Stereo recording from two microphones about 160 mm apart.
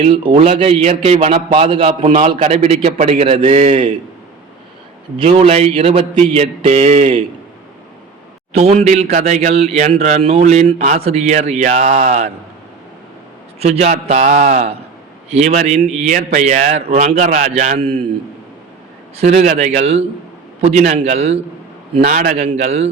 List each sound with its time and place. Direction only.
0.0 s a man's voice: 30° right (ahead or behind)
5.1 s a man's voice: 40° right (ahead or behind)
8.5 s speech: 40° right (ahead or behind)
13.6 s speech: 40° right (ahead or behind)
19.1 s a man's voice: 45° right (ahead or behind)
22.0 s speech: 50° right (ahead or behind)